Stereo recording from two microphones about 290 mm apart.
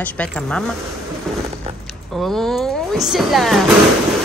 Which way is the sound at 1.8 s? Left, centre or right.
Centre.